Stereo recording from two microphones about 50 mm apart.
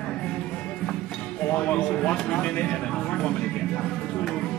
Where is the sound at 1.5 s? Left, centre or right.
Left.